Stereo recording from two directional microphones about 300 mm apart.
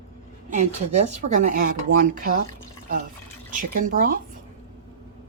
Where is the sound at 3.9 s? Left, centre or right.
Right.